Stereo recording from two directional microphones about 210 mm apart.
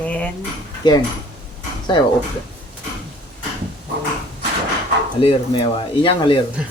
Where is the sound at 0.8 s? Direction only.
20° left (ahead or behind).